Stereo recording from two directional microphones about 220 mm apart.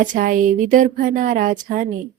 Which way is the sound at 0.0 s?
35° right (ahead or behind).